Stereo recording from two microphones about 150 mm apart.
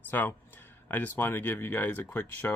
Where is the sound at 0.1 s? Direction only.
10° left (ahead or behind).